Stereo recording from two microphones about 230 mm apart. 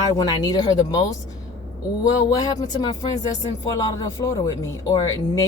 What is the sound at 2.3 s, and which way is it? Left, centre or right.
A woman's voice, centre.